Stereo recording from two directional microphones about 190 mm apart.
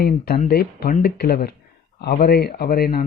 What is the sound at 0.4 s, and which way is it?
A man's voice, 55° left (ahead or behind).